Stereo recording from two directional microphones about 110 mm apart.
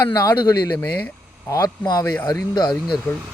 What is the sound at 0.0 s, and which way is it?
Speech, 30° left (ahead or behind).